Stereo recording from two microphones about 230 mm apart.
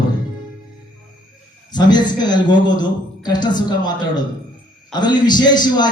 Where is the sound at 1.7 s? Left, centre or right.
Centre.